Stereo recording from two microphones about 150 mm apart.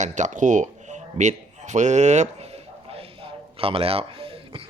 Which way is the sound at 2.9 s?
40° right (ahead or behind).